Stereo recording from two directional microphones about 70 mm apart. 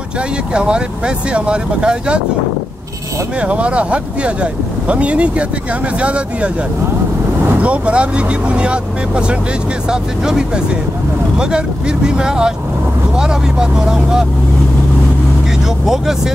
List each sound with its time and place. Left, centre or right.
0.5 s speech: centre
3.3 s speech: centre
7.6 s speech: centre
15.8 s speech: centre